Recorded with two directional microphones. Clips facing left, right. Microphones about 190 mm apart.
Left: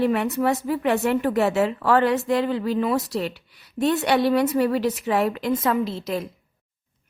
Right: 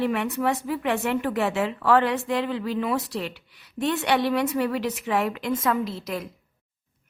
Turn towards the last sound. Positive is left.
turn(degrees=25)  # may be behind; listen again after turning